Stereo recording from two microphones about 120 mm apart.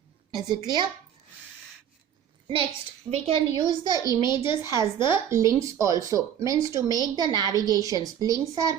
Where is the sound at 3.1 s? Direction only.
50° right (ahead or behind).